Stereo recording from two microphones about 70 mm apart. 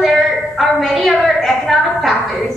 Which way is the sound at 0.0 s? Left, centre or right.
Centre.